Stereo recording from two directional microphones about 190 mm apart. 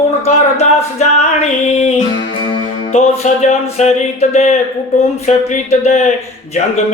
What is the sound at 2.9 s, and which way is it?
Music, 35° left (ahead or behind).